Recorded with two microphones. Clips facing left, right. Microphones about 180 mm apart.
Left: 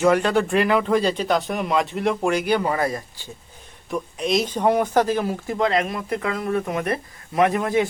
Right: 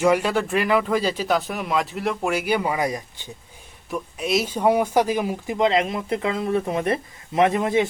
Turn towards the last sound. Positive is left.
turn(degrees=-20)  # may be behind; listen again after turning